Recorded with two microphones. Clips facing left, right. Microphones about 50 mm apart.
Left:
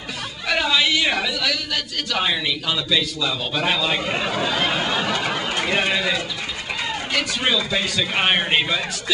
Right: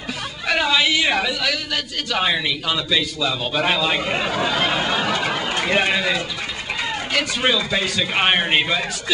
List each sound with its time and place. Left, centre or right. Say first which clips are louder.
0.5 s a woman's voice: right 1 dB; centre
5.8 s a woman's voice: right 2 dB; centre
7.4 s a woman's voice: right 2 dB; centre